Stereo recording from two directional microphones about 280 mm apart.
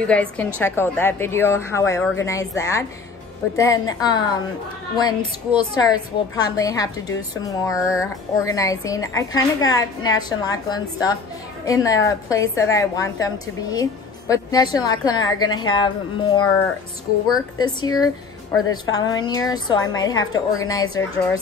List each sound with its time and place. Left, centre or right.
0.0 s a woman's voice: centre